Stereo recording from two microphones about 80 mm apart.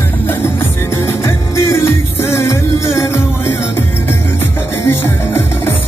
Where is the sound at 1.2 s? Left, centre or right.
Left.